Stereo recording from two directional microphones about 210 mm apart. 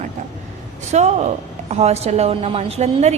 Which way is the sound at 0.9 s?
35° right (ahead or behind).